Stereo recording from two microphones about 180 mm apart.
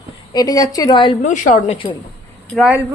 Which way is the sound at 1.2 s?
45° left (ahead or behind).